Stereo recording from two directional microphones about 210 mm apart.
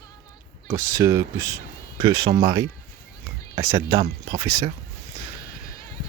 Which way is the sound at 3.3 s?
15° right (ahead or behind).